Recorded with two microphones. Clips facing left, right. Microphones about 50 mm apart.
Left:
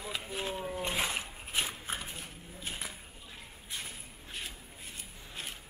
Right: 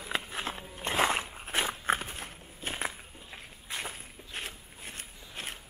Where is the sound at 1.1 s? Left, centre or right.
Right.